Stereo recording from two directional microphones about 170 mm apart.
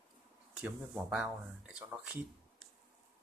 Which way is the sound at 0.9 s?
5° right (ahead or behind).